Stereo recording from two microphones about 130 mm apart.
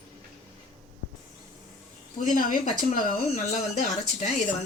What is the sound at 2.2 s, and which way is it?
Speech, 70° left (ahead or behind).